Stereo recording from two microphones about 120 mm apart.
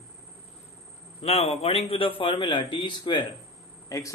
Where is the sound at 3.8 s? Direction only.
30° left (ahead or behind).